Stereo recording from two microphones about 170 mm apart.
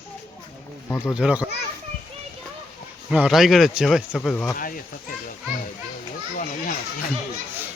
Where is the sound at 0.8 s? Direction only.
15° left (ahead or behind).